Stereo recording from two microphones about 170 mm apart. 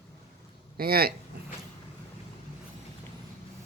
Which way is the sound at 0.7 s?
60° right (ahead or behind).